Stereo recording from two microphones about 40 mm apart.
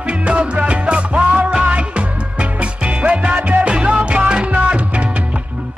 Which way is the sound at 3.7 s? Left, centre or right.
Right.